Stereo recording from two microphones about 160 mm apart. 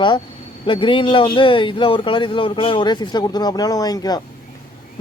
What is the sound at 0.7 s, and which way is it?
A man's voice, 30° left (ahead or behind).